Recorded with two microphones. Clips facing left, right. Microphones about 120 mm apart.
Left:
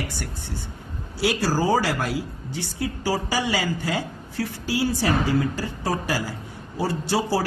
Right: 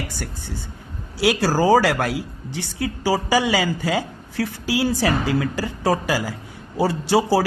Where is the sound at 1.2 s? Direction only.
90° right; by 2.2 s 70° right (ahead or behind).